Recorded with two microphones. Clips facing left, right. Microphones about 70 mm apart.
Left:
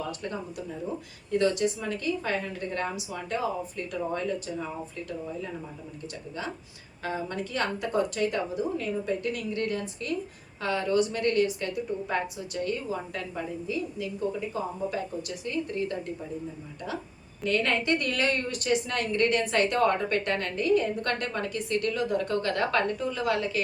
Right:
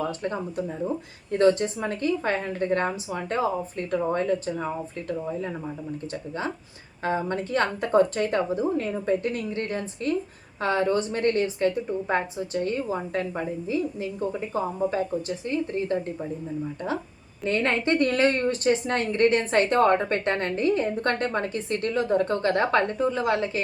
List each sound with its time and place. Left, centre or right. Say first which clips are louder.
0.2 s speech: right 6 dB; right
7.0 s speech: right 6 dB; right
17.4 s speech: right 2 dB; right